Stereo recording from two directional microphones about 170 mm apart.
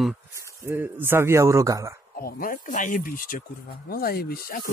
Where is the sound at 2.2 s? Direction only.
60° left (ahead or behind).